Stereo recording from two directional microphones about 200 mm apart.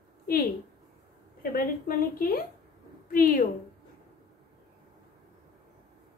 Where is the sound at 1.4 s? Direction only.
45° left (ahead or behind).